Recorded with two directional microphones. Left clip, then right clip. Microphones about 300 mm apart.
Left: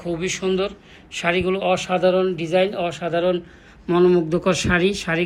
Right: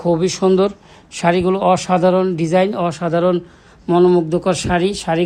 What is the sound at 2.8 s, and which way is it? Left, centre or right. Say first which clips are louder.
Speech: right 4 dB; centre.